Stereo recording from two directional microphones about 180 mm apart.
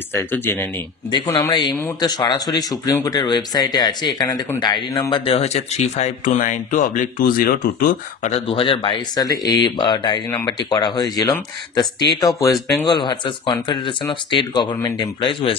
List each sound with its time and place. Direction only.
0.1 s speech: 15° left (ahead or behind)
1.1 s speech: 25° left (ahead or behind); by 8.3 s 55° left (ahead or behind)
8.3 s speech: 35° left (ahead or behind)